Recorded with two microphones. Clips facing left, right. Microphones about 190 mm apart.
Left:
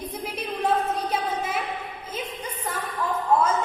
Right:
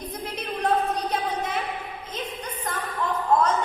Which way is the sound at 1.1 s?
5° left (ahead or behind).